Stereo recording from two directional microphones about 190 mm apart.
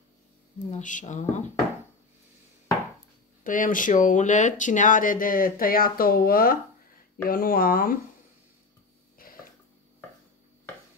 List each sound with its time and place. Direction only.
0.7 s mantra: 40° left (ahead or behind)
3.4 s speech: 45° left (ahead or behind)
9.2 s a sound: 50° left (ahead or behind)